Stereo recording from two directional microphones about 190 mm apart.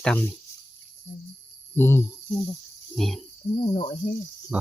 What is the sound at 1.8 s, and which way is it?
Speech, 10° left (ahead or behind).